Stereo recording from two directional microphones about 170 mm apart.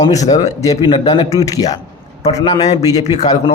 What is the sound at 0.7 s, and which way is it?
Speech, 30° left (ahead or behind).